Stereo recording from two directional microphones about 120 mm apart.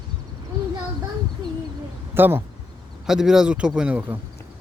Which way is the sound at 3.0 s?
5° right (ahead or behind).